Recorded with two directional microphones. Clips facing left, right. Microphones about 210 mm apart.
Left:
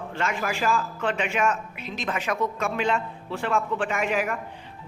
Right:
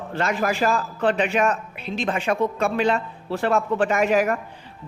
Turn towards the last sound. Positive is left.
turn(degrees=-40)  # may be behind; listen again after turning